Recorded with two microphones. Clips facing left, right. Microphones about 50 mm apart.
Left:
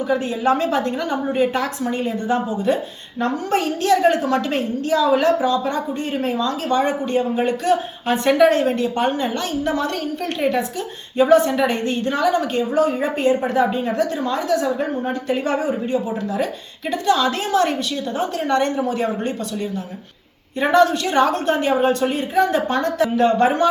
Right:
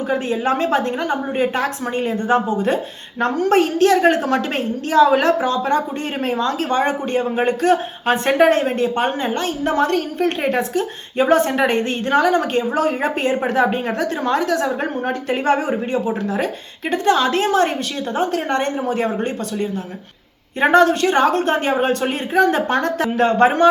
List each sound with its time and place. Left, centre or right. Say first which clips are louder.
0.1 s a woman's voice: left 1 dB; right